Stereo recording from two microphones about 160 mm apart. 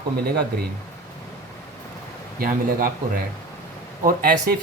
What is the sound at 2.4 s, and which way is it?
Speech, 65° right (ahead or behind).